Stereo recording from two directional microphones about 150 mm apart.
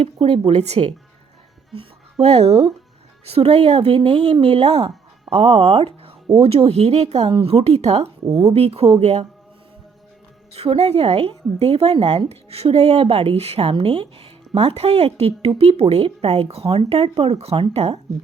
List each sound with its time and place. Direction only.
0.0 s a woman's voice: 40° right (ahead or behind)
8.2 s speech: 25° right (ahead or behind)
8.5 s a woman's voice: 45° right (ahead or behind)
10.5 s a woman's voice: 45° right (ahead or behind)